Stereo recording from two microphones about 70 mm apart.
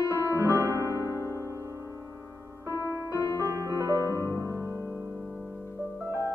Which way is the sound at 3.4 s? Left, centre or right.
Right.